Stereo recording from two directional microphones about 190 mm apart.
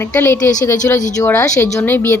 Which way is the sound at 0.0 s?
15° left (ahead or behind).